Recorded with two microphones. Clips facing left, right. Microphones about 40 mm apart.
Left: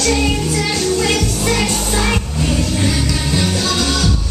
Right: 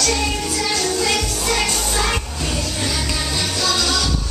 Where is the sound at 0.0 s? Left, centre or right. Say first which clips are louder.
Left 4 dB; centre.